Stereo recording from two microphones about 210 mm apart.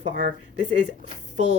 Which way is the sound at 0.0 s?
35° right (ahead or behind).